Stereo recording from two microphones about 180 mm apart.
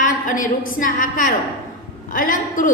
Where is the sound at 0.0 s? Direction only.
45° left (ahead or behind).